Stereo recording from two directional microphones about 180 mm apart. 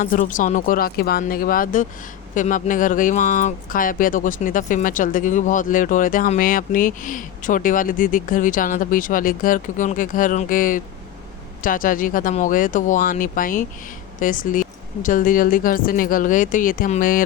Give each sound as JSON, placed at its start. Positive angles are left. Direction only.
{"t": 0.0, "sound": "speech", "side_deg": 45}